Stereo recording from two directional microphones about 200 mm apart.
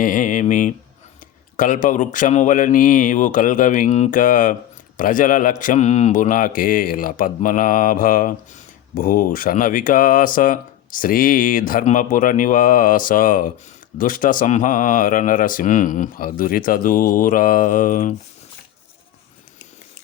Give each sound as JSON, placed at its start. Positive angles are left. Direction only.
{"t": 0.0, "sound": "speech", "side_deg": 40}